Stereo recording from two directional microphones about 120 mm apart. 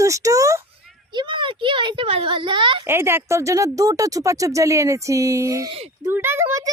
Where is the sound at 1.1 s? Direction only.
40° right (ahead or behind).